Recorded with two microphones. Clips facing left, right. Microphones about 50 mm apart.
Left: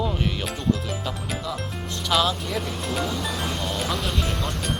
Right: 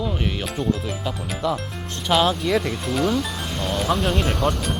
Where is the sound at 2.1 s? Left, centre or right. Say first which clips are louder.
Right 3 dB; centre.